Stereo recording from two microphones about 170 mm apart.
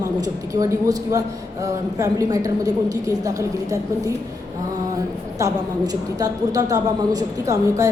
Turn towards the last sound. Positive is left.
turn(degrees=-20)  # may be behind; listen again after turning